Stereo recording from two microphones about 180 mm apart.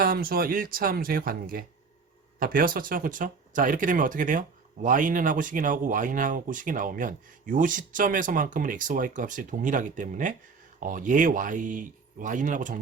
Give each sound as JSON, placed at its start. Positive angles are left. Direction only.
{"t": 0.0, "sound": "speech", "side_deg": -55}